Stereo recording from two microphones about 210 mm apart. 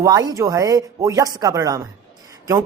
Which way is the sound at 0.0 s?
15° right (ahead or behind).